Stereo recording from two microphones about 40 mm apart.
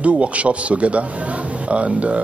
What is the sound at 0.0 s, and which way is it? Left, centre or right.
Speech, right.